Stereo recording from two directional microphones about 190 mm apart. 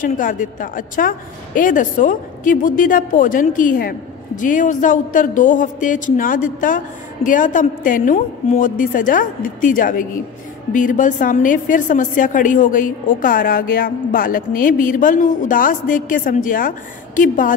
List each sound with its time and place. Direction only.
0.0 s a woman's voice: 45° left (ahead or behind)